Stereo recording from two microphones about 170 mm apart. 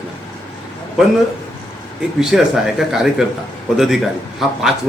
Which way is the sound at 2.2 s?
Centre (ahead or behind).